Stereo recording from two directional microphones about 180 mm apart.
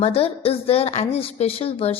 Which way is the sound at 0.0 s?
35° left (ahead or behind).